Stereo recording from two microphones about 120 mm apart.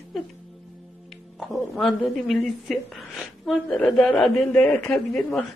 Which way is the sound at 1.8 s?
Centre (ahead or behind).